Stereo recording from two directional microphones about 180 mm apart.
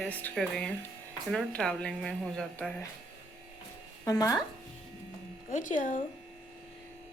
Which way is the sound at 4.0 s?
20° left (ahead or behind).